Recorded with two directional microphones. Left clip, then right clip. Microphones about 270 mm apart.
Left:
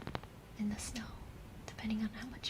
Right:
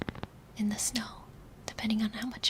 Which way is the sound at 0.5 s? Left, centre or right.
Right.